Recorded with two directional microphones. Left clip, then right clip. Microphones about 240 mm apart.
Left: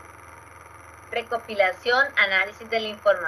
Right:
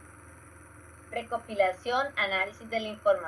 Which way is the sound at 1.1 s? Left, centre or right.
Left.